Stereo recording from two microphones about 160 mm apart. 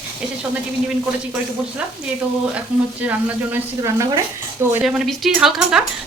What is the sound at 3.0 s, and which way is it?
Speech, 10° right (ahead or behind).